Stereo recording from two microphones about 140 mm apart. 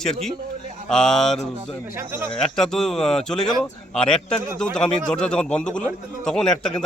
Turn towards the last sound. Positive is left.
turn(degrees=5)  # may be behind; listen again after turning